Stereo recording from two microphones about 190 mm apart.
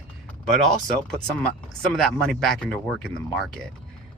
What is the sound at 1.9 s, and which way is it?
Speech, 5° left (ahead or behind).